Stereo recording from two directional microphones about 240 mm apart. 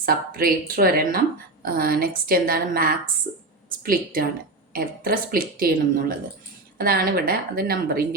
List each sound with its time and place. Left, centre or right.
0.0 s speech: right